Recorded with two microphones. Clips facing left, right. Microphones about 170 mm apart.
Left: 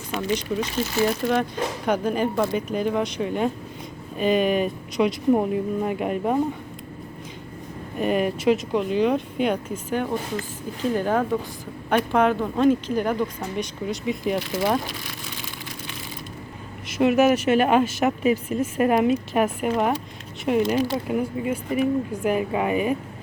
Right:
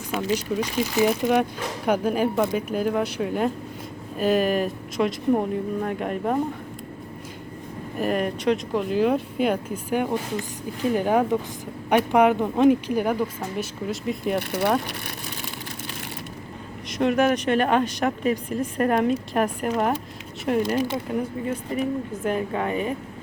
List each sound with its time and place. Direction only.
0.1 s speech: 5° right (ahead or behind)
7.9 s speech: centre (ahead or behind)
17.0 s a woman's voice: 5° left (ahead or behind)